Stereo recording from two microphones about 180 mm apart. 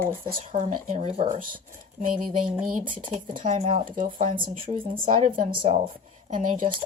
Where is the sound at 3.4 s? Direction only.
40° right (ahead or behind).